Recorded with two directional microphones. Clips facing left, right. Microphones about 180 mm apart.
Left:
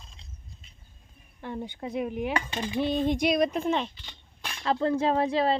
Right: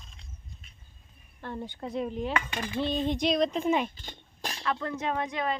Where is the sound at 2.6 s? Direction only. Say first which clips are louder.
Left 4 dB; 15° left (ahead or behind).